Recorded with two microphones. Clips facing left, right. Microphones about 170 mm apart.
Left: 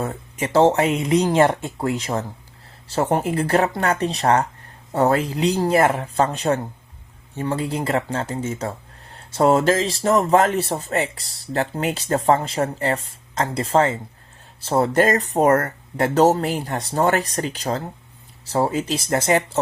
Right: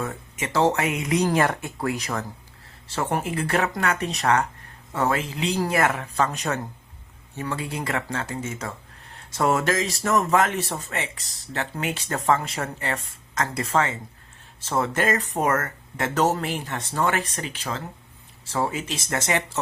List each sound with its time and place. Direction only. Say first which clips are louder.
0.0 s speech: left 4 dB; 30° left (ahead or behind)